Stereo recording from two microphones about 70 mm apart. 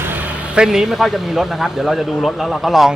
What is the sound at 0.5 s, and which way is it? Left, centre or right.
A man's voice, centre.